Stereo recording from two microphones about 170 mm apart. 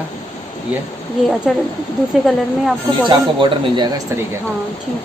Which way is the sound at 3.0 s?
25° right (ahead or behind).